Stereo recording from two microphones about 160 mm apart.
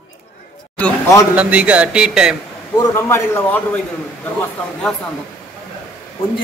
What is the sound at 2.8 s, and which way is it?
A man's voice, 15° left (ahead or behind).